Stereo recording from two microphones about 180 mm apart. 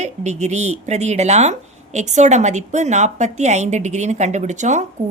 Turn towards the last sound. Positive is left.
turn(degrees=-40)  # may be behind; listen again after turning